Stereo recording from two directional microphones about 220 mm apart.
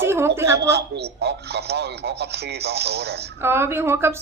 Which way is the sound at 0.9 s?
50° right (ahead or behind).